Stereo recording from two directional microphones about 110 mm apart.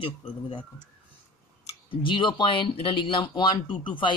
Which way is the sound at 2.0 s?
50° left (ahead or behind).